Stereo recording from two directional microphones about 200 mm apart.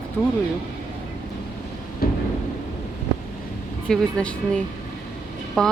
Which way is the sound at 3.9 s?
5° left (ahead or behind).